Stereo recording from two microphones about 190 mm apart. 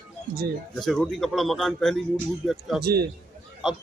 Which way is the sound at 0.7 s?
Centre (ahead or behind).